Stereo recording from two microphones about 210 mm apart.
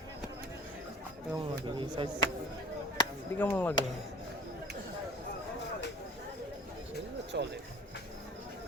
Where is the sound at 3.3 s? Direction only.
10° left (ahead or behind).